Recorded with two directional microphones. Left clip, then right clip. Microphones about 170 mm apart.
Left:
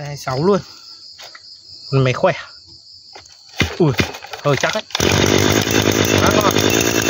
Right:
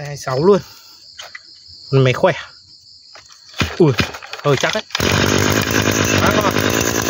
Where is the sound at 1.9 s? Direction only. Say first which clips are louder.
Right 2 dB; 40° right (ahead or behind).